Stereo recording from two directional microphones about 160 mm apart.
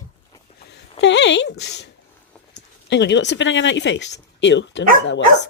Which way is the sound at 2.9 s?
90° left.